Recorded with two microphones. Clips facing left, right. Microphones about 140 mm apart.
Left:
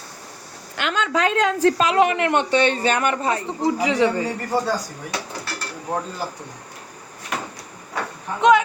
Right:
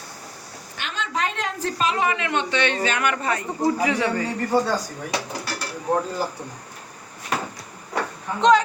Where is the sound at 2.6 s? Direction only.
35° left (ahead or behind).